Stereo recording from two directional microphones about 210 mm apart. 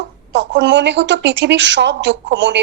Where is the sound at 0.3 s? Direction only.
55° right (ahead or behind).